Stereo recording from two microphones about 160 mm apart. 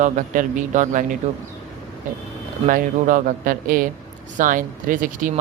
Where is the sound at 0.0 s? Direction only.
55° right (ahead or behind).